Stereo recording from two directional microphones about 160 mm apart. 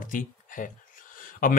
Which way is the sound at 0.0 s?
55° left (ahead or behind).